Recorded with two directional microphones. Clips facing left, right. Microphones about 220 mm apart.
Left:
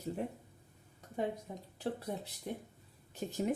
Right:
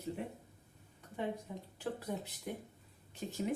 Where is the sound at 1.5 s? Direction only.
40° left (ahead or behind).